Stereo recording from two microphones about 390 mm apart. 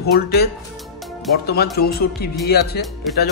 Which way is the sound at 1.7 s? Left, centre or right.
Left.